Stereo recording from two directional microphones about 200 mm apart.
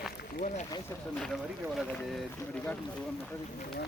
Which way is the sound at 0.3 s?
40° left (ahead or behind).